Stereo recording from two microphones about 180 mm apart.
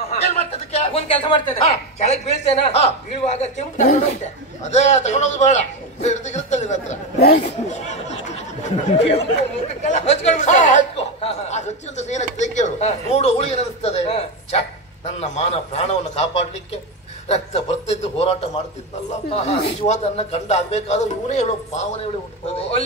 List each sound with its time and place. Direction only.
0.1 s a sound: 35° left (ahead or behind)
2.5 s speech: 35° left (ahead or behind)
7.2 s speech: 60° left (ahead or behind)
7.4 s speech: 40° left (ahead or behind)
19.6 s speech: 35° left (ahead or behind)